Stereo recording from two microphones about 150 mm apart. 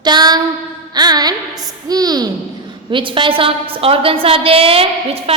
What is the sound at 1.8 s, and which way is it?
A woman's voice, 25° right (ahead or behind).